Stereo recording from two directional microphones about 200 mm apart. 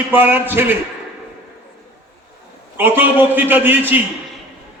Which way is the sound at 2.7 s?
10° right (ahead or behind).